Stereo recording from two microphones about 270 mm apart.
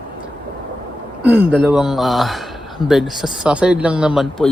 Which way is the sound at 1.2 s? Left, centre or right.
Centre.